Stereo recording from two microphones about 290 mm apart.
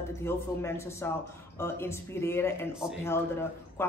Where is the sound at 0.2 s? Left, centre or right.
Centre.